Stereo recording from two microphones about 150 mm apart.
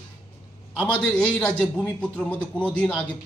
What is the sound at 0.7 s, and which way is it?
A man's voice, 10° left (ahead or behind).